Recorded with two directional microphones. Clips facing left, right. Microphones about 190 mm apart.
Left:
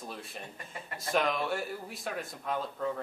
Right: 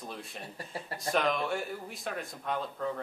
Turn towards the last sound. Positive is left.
turn(degrees=0)  # may be behind; listen again after turning